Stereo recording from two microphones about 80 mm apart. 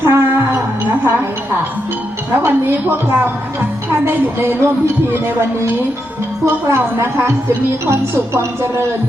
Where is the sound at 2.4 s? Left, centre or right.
Right.